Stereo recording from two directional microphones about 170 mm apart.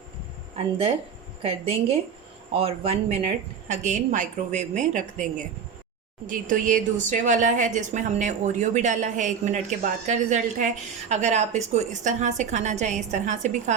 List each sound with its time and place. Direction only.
1.4 s a woman's voice: 35° right (ahead or behind)